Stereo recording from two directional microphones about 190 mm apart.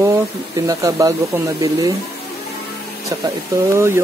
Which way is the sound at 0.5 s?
20° right (ahead or behind).